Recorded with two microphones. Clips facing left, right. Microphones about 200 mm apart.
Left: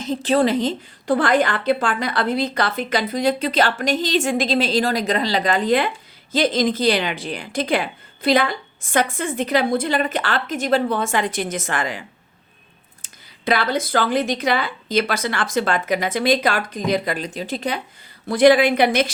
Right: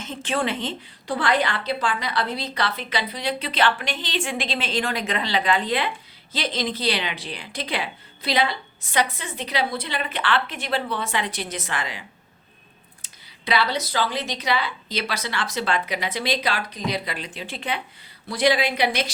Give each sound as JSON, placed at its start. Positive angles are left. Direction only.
{"t": 0.0, "sound": "a woman's voice", "side_deg": 35}